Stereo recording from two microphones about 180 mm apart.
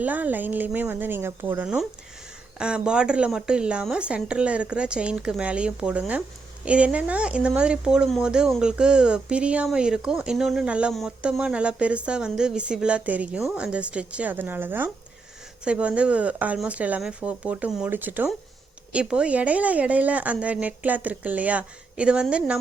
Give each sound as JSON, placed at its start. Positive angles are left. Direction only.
{"t": 0.0, "sound": "speech", "side_deg": -10}